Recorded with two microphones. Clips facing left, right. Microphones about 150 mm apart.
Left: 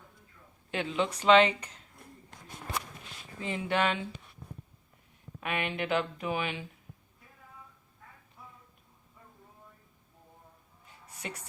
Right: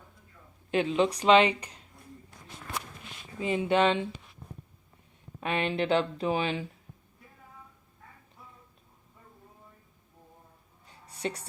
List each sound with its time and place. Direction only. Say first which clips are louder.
0.7 s speech: right 6 dB; 20° right (ahead or behind)
3.4 s speech: right 5 dB; 20° right (ahead or behind)
5.4 s speech: right 4 dB; 30° right (ahead or behind)
11.1 s music: right 8 dB; 30° right (ahead or behind)